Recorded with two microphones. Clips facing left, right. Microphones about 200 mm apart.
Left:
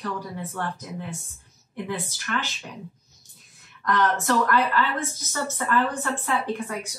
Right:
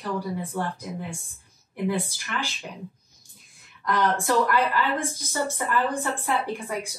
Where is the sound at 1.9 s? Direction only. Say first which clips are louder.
Right 5 dB; 10° right (ahead or behind).